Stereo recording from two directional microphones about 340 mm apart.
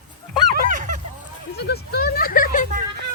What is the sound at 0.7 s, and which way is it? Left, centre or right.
Honk, right.